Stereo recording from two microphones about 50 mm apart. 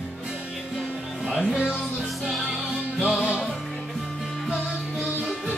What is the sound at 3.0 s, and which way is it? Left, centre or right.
Music, centre.